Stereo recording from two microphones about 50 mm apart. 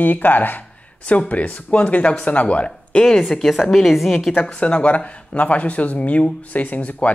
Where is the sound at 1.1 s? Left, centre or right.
Left.